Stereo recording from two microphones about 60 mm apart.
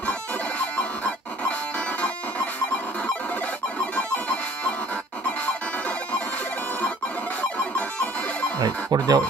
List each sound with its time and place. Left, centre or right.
0.6 s music: left
3.9 s music: left
7.5 s music: left
8.5 s speech: right